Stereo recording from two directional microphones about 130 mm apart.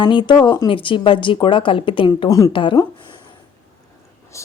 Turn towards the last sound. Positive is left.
turn(degrees=25)  # may be behind; listen again after turning